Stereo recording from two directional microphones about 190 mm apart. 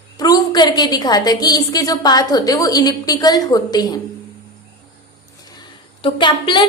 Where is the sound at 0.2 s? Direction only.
20° left (ahead or behind).